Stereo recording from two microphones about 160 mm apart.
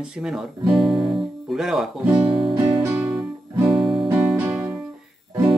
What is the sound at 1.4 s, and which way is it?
Speech, centre (ahead or behind).